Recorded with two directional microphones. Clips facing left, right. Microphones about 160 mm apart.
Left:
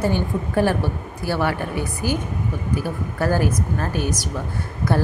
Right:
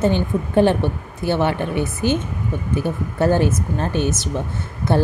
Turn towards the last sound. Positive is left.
turn(degrees=-25)  # may be behind; listen again after turning